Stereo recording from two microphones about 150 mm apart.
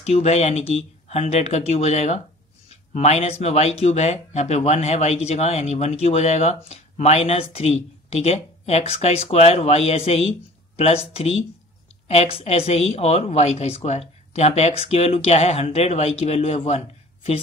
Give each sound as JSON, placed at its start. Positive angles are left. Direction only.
{"t": 0.0, "sound": "speech", "side_deg": 45}